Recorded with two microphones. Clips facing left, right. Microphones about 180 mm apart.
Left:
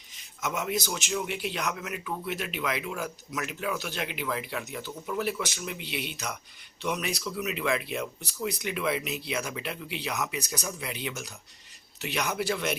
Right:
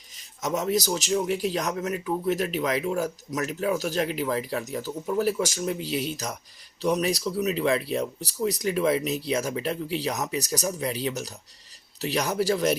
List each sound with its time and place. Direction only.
0.4 s a man's voice: 40° right (ahead or behind)